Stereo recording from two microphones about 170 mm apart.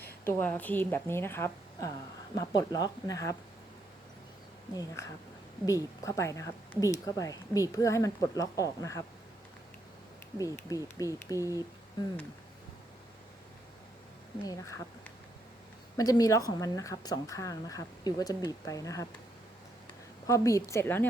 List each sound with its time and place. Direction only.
0.3 s a woman's voice: 10° left (ahead or behind)
4.7 s speech: 20° left (ahead or behind)
10.3 s speech: 20° left (ahead or behind)
11.3 s speech: 15° right (ahead or behind)
14.4 s speech: 20° left (ahead or behind)
16.0 s speech: 20° left (ahead or behind)
20.2 s a woman's voice: 20° left (ahead or behind)